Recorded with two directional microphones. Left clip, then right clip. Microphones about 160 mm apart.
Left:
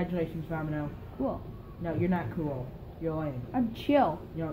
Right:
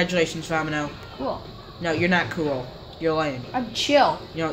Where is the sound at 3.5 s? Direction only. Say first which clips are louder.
Right 6 dB; 35° left (ahead or behind).